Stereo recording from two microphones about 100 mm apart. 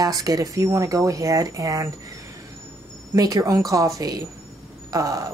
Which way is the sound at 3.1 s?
40° right (ahead or behind).